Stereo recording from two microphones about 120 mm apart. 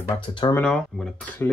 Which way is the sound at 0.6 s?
5° left (ahead or behind).